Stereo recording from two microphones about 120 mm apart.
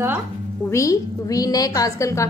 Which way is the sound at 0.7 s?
25° left (ahead or behind).